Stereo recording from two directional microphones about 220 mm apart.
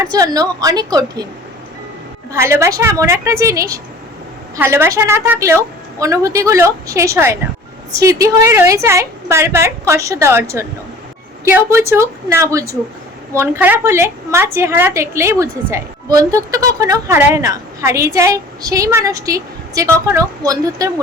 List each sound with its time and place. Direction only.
0.0 s a woman's voice: 15° right (ahead or behind)
2.3 s a woman's voice: 10° right (ahead or behind)